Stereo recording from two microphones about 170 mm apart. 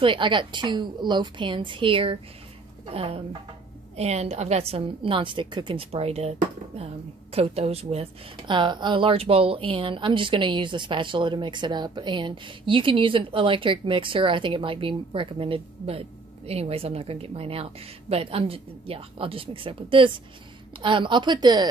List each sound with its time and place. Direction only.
0.0 s a woman's voice: 30° right (ahead or behind)